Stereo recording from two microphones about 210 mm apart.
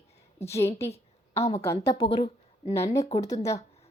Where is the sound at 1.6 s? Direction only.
15° left (ahead or behind).